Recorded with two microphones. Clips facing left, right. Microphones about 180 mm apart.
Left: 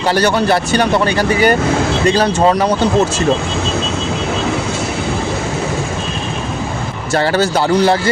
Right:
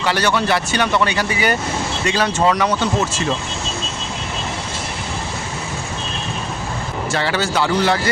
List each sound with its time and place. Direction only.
0.0 s speech: 40° left (ahead or behind)
2.0 s speech: 35° left (ahead or behind)
7.1 s speech: 40° left (ahead or behind)